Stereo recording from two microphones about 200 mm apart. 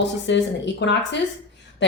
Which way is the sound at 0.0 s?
65° left (ahead or behind).